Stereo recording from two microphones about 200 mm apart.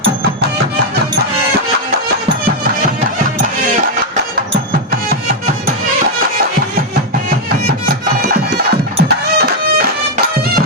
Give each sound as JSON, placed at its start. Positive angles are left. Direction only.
{"t": 8.5, "sound": "music", "side_deg": -50}